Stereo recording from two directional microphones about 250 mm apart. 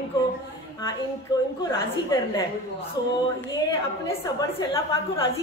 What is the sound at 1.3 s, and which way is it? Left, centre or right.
A woman's voice, centre.